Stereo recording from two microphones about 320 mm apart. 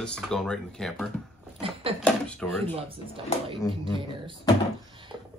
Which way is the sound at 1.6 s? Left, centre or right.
Centre.